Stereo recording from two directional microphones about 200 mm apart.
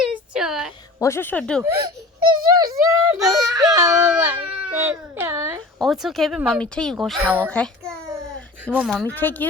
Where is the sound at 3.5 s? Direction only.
20° right (ahead or behind).